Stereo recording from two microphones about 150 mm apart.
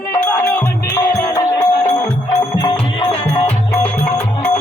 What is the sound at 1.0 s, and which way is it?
Music, 20° left (ahead or behind).